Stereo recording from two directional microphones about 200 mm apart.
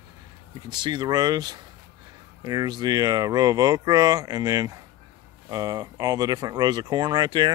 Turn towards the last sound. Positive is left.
turn(degrees=-20)  # may be behind; listen again after turning